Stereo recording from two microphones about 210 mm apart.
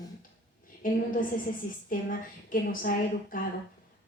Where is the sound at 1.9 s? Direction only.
40° left (ahead or behind).